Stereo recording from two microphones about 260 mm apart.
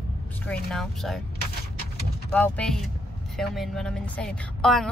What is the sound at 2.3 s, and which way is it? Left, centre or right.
A woman's voice, centre.